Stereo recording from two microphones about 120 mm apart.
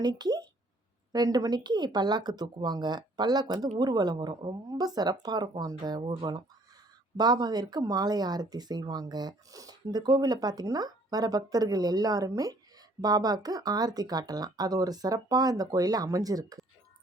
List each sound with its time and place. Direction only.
0.0 s speech: 35° right (ahead or behind)